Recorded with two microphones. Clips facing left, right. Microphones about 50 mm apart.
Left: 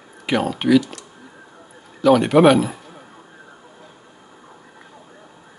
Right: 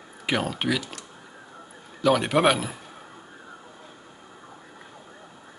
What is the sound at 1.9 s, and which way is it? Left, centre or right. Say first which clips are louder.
Speech: left 7 dB; centre.